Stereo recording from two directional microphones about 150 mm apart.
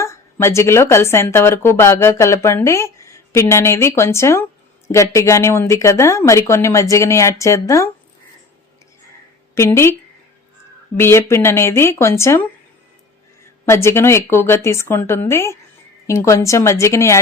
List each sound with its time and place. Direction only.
0.0 s a woman's voice: 20° left (ahead or behind)
9.6 s a woman's voice: 15° left (ahead or behind)
10.9 s a woman's voice: 15° left (ahead or behind)
13.7 s a woman's voice: 15° left (ahead or behind)